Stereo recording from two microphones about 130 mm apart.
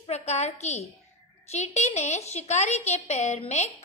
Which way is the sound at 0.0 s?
60° left (ahead or behind).